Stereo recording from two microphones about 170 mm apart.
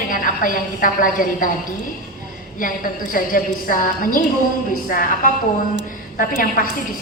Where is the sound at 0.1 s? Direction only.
55° left (ahead or behind).